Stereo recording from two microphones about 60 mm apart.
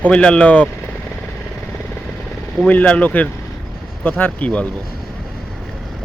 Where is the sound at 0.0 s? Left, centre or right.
Centre.